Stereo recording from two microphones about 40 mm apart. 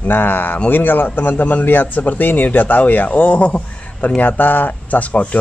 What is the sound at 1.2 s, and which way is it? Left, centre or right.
A man's voice, left.